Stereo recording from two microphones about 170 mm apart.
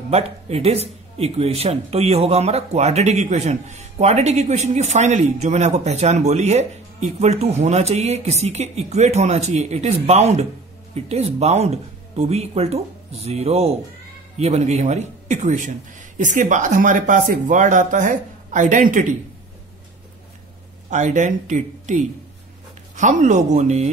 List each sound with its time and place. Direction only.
0.1 s a man's voice: 35° right (ahead or behind)
20.9 s a man's voice: 45° right (ahead or behind)